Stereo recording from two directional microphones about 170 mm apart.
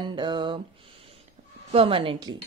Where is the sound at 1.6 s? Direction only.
35° right (ahead or behind).